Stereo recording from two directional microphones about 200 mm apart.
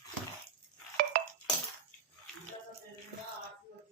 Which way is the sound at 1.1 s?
45° right (ahead or behind).